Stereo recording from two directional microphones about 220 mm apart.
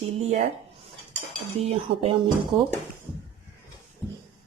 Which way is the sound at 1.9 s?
50° right (ahead or behind).